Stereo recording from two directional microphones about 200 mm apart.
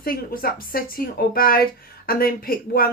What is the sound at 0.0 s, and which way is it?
Speech, 45° left (ahead or behind).